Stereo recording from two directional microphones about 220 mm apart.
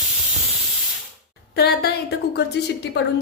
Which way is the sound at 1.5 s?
45° left (ahead or behind).